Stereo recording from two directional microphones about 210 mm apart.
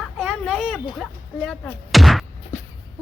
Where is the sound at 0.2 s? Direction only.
5° right (ahead or behind).